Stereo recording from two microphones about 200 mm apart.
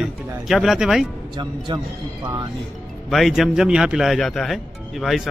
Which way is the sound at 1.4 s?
25° right (ahead or behind).